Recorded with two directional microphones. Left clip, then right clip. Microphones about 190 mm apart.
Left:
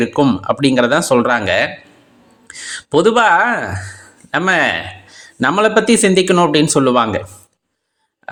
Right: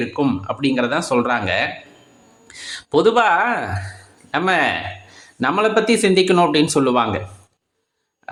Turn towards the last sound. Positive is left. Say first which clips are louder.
# left 4 dB
turn(degrees=20)  # may be behind; listen again after turning